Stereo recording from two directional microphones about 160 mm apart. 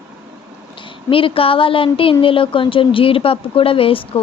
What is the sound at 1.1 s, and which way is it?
Speech, 35° left (ahead or behind).